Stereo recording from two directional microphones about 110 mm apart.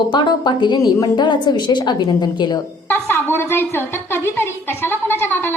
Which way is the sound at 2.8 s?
20° left (ahead or behind).